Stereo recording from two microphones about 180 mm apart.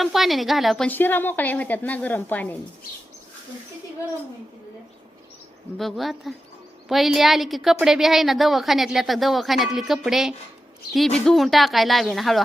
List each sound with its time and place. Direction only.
0.0 s a woman's voice: centre (ahead or behind)
5.7 s a woman's voice: centre (ahead or behind)